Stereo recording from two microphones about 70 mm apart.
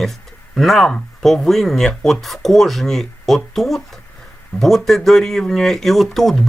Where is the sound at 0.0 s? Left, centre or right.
Centre.